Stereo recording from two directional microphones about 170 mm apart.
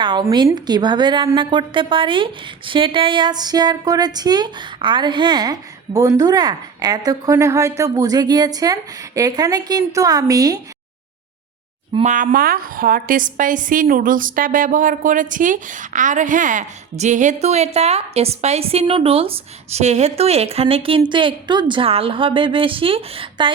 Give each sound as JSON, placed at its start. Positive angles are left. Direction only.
{"t": 0.0, "sound": "a woman's voice", "side_deg": -25}
{"t": 12.0, "sound": "a woman's voice", "side_deg": -50}